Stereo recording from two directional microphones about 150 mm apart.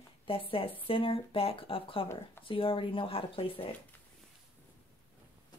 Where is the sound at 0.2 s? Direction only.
35° left (ahead or behind).